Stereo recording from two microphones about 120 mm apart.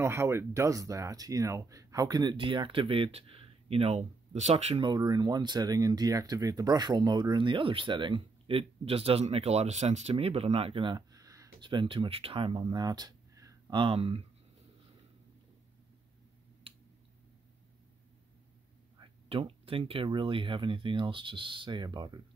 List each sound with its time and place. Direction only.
0.0 s speech: 25° right (ahead or behind)
2.3 s speech: 45° right (ahead or behind); by 4.8 s 65° right (ahead or behind)
4.8 s speech: 35° right (ahead or behind)
11.0 s a sound: 30° right (ahead or behind)
11.6 s speech: 40° right (ahead or behind)
13.7 s speech: 45° right (ahead or behind)
19.2 s speech: 50° right (ahead or behind)